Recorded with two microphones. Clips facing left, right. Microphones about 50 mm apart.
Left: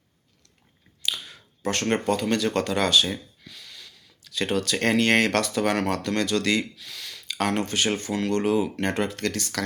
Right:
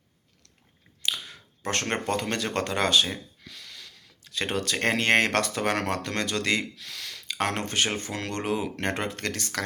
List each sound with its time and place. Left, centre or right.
1.0 s speech: right
3.4 s gasp: right
4.2 s speech: right
6.7 s speech: right
7.3 s speech: right